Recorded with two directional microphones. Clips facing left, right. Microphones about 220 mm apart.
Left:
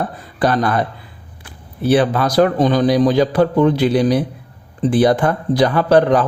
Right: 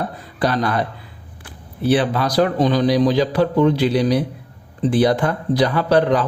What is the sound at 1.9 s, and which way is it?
A man's voice, 50° left (ahead or behind).